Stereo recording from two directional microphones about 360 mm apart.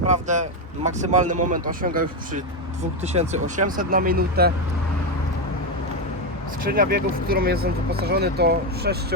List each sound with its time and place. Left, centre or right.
0.0 s vehicle: centre
0.9 s speech: centre
6.7 s speech: right